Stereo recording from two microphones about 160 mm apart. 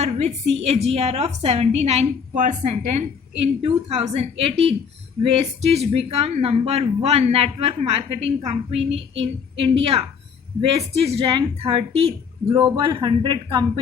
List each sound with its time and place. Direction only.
0.0 s a man's voice: 40° right (ahead or behind)